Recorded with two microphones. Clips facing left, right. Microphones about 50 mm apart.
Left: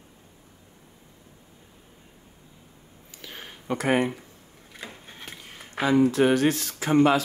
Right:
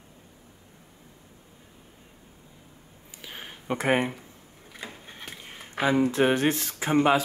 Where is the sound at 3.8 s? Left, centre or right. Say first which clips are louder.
Left 1 dB; right.